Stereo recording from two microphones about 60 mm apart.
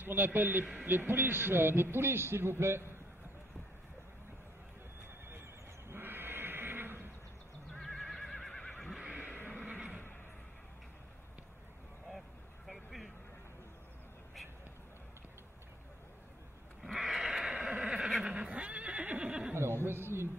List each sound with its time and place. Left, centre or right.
0.0 s a man's voice: right
5.9 s bleat: right
7.8 s neigh: centre
9.1 s a sound: right
9.4 s neigh: left
9.7 s neigh: right
12.6 s vehicle: centre
16.8 s sheep: centre
18.3 s neigh: right
19.8 s a sound: right